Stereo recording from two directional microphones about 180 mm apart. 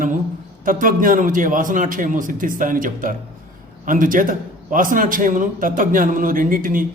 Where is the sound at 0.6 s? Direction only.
50° right (ahead or behind).